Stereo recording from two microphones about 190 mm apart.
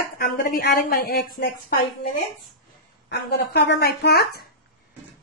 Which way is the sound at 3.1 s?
60° left (ahead or behind).